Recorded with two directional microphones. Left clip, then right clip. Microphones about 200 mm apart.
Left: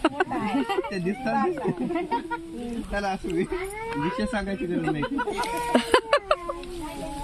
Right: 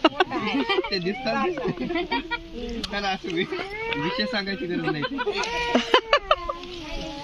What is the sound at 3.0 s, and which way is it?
Speech, 5° right (ahead or behind).